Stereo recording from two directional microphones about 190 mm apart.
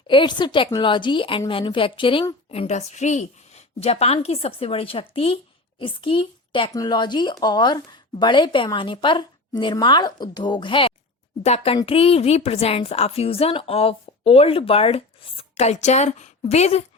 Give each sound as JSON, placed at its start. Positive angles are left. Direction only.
{"t": 0.1, "sound": "a woman's voice", "side_deg": 25}